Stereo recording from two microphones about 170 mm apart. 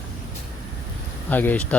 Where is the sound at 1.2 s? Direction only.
10° left (ahead or behind).